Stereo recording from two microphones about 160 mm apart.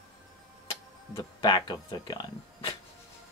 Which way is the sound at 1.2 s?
25° left (ahead or behind).